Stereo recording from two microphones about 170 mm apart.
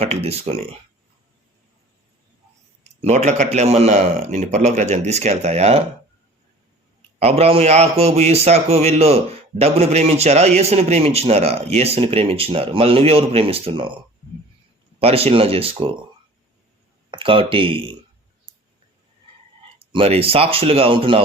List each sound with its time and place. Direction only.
0.0 s a man's voice: 35° right (ahead or behind)
3.0 s a man's voice: 45° right (ahead or behind)
7.2 s a man's voice: 35° right (ahead or behind)
14.9 s a man's voice: 35° right (ahead or behind)
17.1 s speech: 30° right (ahead or behind)
18.5 s clicking: 30° right (ahead or behind)
19.8 s a man's voice: 35° right (ahead or behind)